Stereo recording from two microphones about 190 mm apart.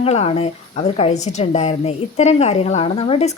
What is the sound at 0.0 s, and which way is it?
A woman's voice, 30° left (ahead or behind).